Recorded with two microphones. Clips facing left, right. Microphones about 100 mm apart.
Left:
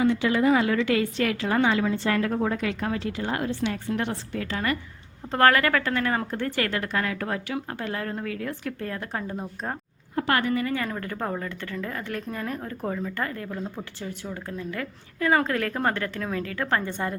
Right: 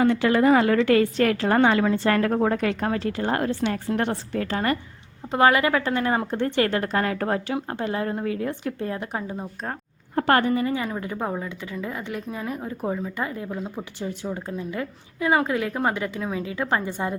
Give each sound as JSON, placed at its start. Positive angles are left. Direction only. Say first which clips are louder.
{"t": 0.0, "sound": "a woman's voice", "louder": "right 3 dB", "side_deg": -55}
{"t": 5.3, "sound": "a woman's voice", "louder": "right 1 dB", "side_deg": -15}
{"t": 9.2, "sound": "speech", "louder": "right 1 dB", "side_deg": 0}
{"t": 10.2, "sound": "a woman's voice", "louder": "right 4 dB", "side_deg": -40}
{"t": 10.8, "sound": "a woman's voice", "louder": "right 2 dB", "side_deg": -15}